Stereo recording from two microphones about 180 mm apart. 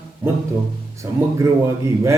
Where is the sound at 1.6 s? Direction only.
15° right (ahead or behind).